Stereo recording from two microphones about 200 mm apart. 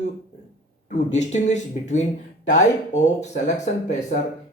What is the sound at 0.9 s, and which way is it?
Speech, 35° left (ahead or behind).